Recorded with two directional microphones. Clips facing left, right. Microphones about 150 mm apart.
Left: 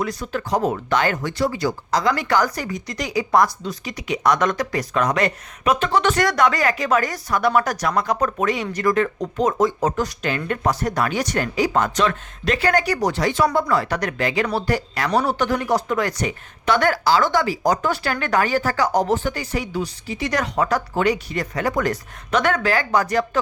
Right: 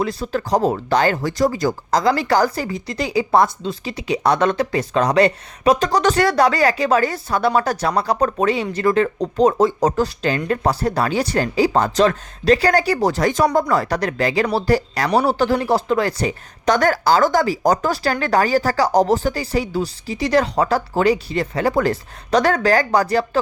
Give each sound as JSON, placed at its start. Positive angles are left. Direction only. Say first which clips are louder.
{"t": 0.0, "sound": "speech", "louder": "right 3 dB", "side_deg": -30}
{"t": 13.1, "sound": "speech", "louder": "right 3 dB", "side_deg": -40}